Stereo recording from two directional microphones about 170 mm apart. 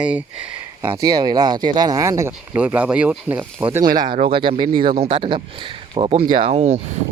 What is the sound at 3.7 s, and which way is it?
Speech, 25° right (ahead or behind).